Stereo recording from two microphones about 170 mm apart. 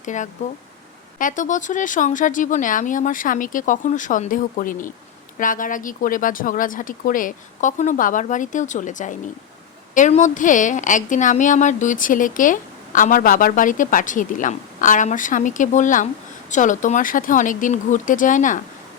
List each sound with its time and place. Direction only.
0.0 s a woman's voice: 45° left (ahead or behind)